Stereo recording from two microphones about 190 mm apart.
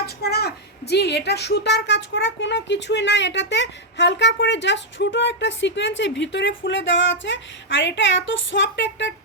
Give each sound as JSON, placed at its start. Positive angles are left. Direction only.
{"t": 0.0, "sound": "speech", "side_deg": 55}